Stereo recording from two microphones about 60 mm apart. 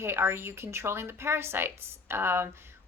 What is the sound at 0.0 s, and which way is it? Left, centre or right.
Speech, right.